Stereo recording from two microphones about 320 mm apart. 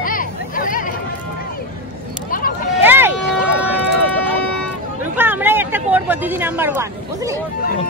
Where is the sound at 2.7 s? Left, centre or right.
Centre.